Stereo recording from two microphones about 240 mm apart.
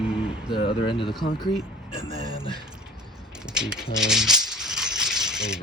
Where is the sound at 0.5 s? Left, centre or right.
Left.